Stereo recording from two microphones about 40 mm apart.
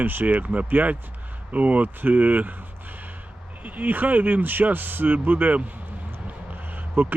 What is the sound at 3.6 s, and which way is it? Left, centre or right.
Speech, right.